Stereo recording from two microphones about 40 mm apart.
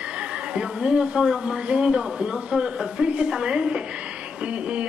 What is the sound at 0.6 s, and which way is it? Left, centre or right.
Speech, right.